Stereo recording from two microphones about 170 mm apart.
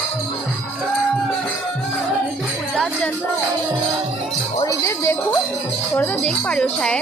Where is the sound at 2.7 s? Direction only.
5° left (ahead or behind).